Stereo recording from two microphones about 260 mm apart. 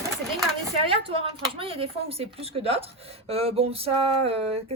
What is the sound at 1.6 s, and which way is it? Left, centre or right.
A woman's voice, right.